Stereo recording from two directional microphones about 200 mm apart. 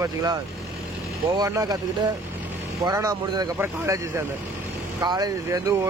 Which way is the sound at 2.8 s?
20° right (ahead or behind).